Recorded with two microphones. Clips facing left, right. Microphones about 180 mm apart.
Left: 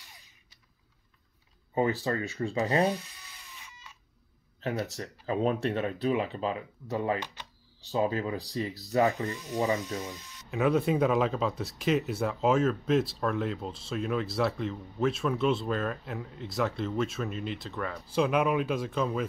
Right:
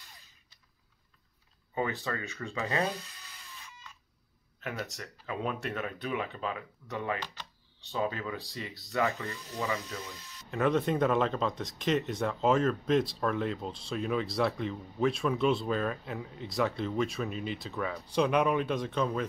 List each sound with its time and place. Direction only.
1.8 s speech: 35° left (ahead or behind)
4.9 s speech: 35° left (ahead or behind)
10.5 s speech: 5° left (ahead or behind)